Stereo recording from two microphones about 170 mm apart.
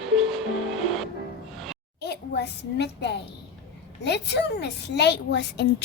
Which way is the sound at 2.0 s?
80° left.